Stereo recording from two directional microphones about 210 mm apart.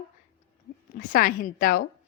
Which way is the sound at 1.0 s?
40° left (ahead or behind).